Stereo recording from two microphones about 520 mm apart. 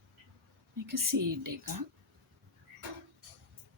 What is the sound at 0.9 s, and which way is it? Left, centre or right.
Speech, right.